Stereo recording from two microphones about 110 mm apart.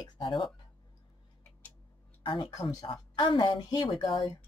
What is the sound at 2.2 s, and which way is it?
Speech, 45° left (ahead or behind).